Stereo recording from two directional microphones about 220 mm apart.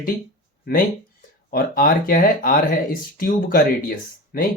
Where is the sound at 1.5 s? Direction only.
40° left (ahead or behind).